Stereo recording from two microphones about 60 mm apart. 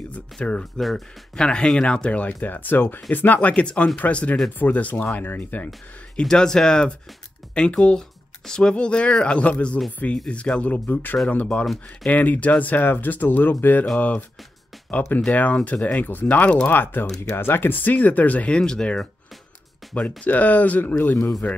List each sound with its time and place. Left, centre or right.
0.1 s speech: centre
0.7 s speech: centre
1.3 s speech: centre; by 5.7 s left
6.1 s speech: centre
11.6 s speech: centre
12.1 s speech: left
15.3 s speech: left
18.6 s speech: centre
20.2 s speech: left